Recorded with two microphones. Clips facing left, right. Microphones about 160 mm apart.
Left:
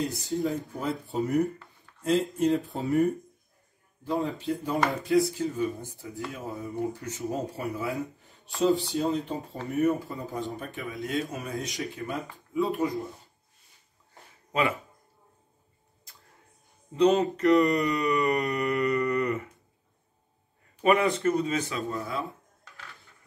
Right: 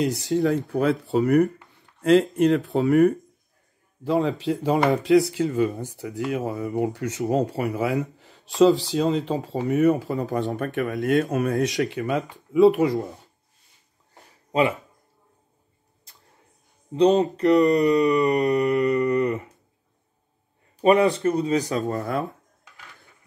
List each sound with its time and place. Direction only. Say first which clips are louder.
0.0 s speech: right 7 dB; 75° right (ahead or behind)
2.0 s a sound: right 8 dB; 75° right (ahead or behind)
2.3 s speech: right 6 dB; 75° right (ahead or behind)
4.0 s speech: right 7 dB; 90° right
16.9 s speech: right 4 dB; 30° right (ahead or behind)
18.5 s humming: right 6 dB; 30° right (ahead or behind)
20.8 s speech: right 5 dB; 30° right (ahead or behind)
21.9 s speech: right 6 dB; 55° right (ahead or behind)